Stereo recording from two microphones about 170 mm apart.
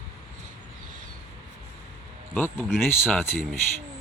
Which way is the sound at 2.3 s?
10° left (ahead or behind).